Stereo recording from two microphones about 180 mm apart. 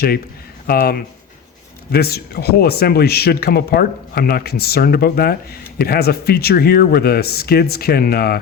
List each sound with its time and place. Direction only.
0.7 s speech: 55° left (ahead or behind)